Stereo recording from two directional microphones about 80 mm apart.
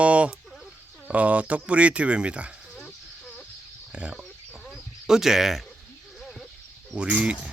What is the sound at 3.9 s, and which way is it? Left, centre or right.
Chicken, centre.